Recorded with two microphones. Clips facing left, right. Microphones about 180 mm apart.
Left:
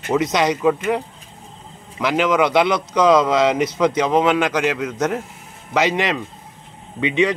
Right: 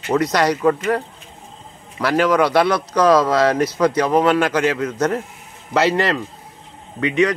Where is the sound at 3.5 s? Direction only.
20° left (ahead or behind).